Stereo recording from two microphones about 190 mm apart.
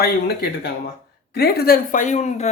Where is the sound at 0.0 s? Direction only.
55° left (ahead or behind).